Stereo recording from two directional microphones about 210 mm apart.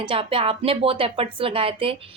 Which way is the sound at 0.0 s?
25° right (ahead or behind).